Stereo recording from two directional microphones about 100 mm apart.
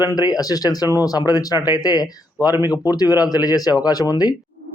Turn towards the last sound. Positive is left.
turn(degrees=40)  # may be behind; listen again after turning